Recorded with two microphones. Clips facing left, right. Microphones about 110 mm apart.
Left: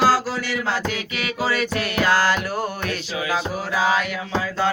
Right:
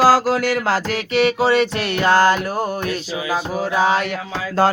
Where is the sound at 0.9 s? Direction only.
30° right (ahead or behind).